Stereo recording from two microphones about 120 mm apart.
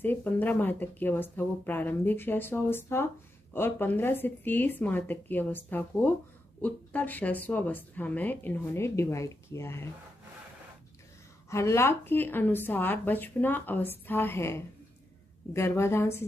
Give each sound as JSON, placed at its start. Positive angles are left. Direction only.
{"t": 0.0, "sound": "speech", "side_deg": 15}
{"t": 11.5, "sound": "a woman's voice", "side_deg": 25}